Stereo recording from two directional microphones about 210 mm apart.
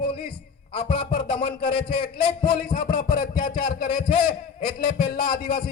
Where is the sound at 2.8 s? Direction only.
45° left (ahead or behind).